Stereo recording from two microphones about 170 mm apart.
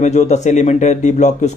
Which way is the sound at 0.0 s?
45° left (ahead or behind).